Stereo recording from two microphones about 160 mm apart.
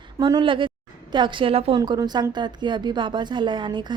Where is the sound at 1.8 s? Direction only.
25° right (ahead or behind).